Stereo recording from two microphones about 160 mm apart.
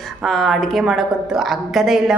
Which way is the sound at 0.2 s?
Centre (ahead or behind).